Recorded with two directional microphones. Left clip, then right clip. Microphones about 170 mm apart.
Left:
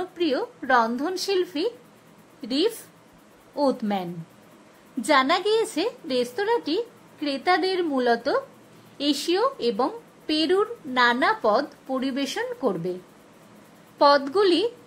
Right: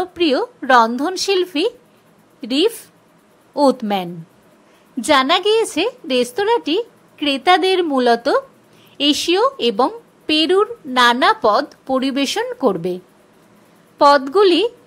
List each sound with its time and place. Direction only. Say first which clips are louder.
0.0 s speech: right 8 dB; 25° right (ahead or behind)